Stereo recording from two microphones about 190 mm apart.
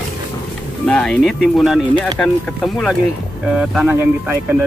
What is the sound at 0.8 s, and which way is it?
Speech, 5° left (ahead or behind).